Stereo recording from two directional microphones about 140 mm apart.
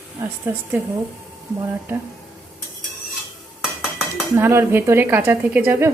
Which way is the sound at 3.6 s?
Centre (ahead or behind).